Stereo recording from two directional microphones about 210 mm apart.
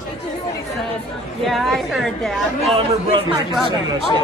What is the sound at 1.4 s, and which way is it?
Speech, centre (ahead or behind).